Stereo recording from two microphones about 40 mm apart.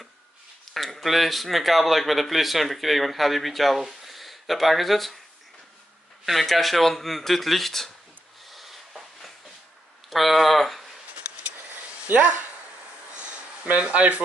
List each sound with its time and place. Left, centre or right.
0.7 s speech: centre
6.2 s speech: centre
8.5 s a sound: centre
10.0 s speech: centre
12.1 s speech: right
13.1 s a sound: right
13.7 s speech: right